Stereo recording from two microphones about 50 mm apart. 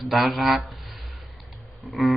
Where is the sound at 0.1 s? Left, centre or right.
Centre.